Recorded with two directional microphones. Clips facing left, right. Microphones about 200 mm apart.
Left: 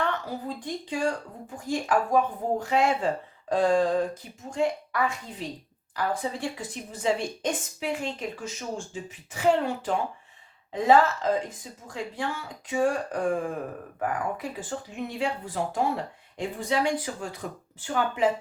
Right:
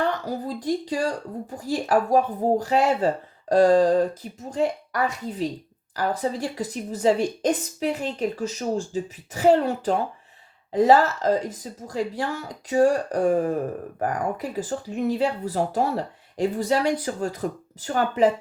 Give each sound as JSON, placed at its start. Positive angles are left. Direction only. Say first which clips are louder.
{"t": 0.0, "sound": "speech", "louder": "right 4 dB", "side_deg": -35}
{"t": 14.5, "sound": "speech", "louder": "right 7 dB", "side_deg": -40}